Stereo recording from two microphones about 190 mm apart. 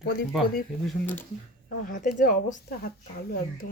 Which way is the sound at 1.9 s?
50° left (ahead or behind).